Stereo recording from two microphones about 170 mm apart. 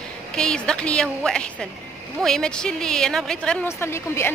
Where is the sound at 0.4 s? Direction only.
5° left (ahead or behind).